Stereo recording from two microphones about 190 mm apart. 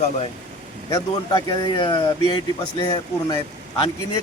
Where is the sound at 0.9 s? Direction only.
20° left (ahead or behind).